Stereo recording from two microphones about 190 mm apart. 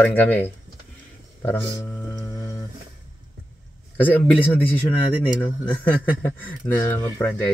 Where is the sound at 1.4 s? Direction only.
10° left (ahead or behind).